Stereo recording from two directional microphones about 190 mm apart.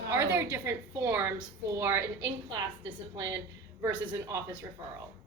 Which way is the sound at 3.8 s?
15° right (ahead or behind).